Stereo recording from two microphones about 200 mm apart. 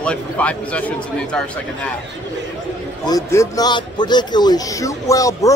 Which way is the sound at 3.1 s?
15° left (ahead or behind).